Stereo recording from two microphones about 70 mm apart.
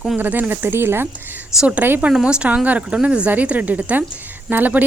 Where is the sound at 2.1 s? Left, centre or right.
Centre; by 4.8 s right.